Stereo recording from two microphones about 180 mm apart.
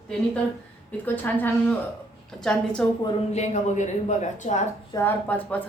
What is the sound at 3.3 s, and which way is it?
Speech, 40° left (ahead or behind).